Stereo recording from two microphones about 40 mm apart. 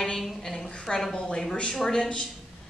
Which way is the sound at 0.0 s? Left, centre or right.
Centre.